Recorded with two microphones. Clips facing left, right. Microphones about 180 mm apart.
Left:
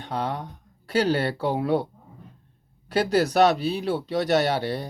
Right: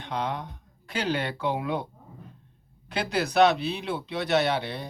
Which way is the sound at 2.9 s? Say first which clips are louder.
Left 5 dB; 40° left (ahead or behind).